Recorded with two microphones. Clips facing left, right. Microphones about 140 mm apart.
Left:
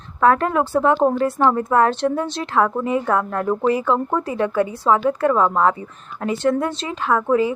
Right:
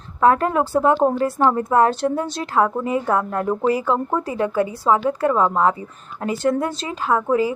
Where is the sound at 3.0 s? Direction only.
25° right (ahead or behind).